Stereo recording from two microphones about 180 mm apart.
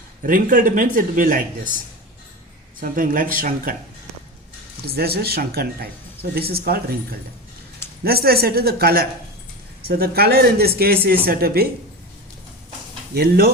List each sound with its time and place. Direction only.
0.2 s speech: 45° right (ahead or behind)
2.8 s speech: 50° right (ahead or behind)
4.9 s speech: 60° right (ahead or behind)
13.1 s speech: 60° right (ahead or behind)